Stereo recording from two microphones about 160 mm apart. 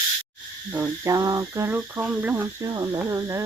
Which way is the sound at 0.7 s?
15° right (ahead or behind).